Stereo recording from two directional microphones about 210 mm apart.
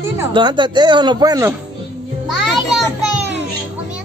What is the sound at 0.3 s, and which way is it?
Speech, 20° right (ahead or behind).